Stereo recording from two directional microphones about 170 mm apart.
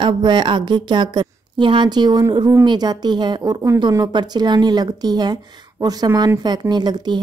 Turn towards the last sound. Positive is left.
turn(degrees=-25)  # may be behind; listen again after turning